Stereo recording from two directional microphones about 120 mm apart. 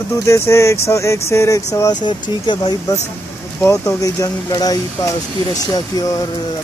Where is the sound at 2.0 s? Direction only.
40° left (ahead or behind).